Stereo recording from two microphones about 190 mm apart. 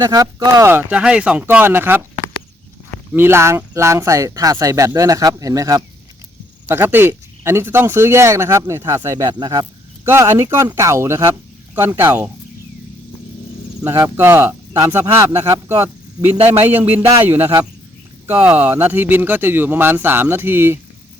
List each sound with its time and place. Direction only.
0.0 s speech: 20° right (ahead or behind)
3.1 s speech: 10° right (ahead or behind)
13.8 s speech: 15° right (ahead or behind)